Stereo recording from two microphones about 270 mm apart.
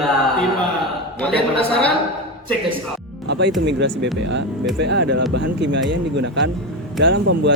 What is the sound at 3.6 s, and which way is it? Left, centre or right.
Speech, right.